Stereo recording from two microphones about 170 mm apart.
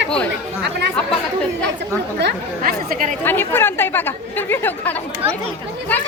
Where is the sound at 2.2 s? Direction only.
80° right.